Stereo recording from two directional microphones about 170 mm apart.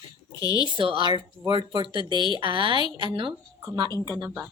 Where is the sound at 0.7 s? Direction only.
30° right (ahead or behind).